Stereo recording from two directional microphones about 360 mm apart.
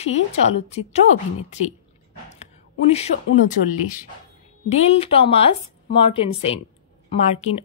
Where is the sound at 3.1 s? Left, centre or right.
Left.